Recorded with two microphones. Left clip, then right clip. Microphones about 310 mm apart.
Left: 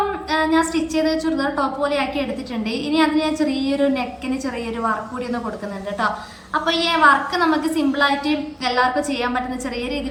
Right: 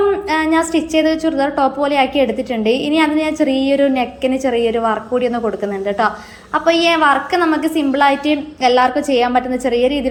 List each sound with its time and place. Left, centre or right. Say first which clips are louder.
0.3 s a woman's voice: right 3 dB; centre
6.5 s a woman's voice: right 6 dB; centre